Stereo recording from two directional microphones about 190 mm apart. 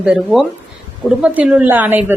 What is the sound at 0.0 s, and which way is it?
A woman's voice, 5° right (ahead or behind).